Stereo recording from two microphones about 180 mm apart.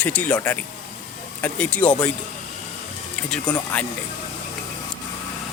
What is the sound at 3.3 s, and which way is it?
Speech, 10° left (ahead or behind).